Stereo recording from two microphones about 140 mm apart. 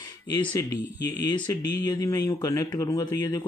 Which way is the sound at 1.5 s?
30° left (ahead or behind).